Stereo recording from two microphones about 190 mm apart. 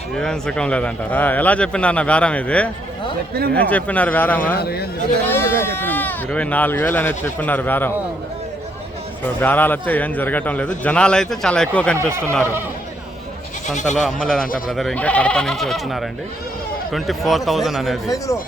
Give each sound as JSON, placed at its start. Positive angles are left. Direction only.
{"t": 0.2, "sound": "a man's voice", "side_deg": 5}
{"t": 4.5, "sound": "a man's voice", "side_deg": 55}
{"t": 5.3, "sound": "a man's voice", "side_deg": 10}
{"t": 9.2, "sound": "a man's voice", "side_deg": 10}
{"t": 11.9, "sound": "speech", "side_deg": -15}
{"t": 13.9, "sound": "speech", "side_deg": 0}